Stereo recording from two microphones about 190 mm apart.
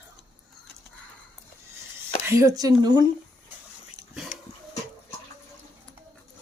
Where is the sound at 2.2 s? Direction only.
15° right (ahead or behind).